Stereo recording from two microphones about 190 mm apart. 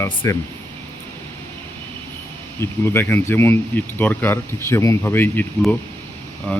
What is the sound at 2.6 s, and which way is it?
Speech, 10° left (ahead or behind).